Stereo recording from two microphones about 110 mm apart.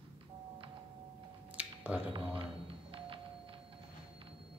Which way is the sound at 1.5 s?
15° right (ahead or behind).